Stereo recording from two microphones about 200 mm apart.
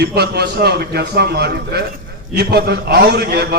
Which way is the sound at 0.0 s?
55° right (ahead or behind).